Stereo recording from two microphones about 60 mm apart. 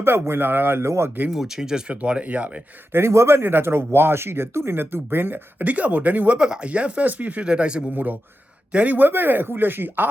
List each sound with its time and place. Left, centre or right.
0.0 s speech: right
1.3 s speech: centre
1.9 s speech: right
2.9 s speech: right; by 7.9 s centre
7.9 s speech: right